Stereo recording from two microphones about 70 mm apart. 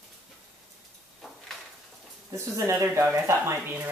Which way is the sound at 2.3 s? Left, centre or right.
Right.